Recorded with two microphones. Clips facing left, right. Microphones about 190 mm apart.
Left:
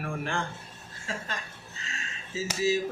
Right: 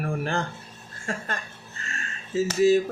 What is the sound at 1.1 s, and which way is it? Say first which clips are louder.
Speech: right 5 dB; 55° right (ahead or behind).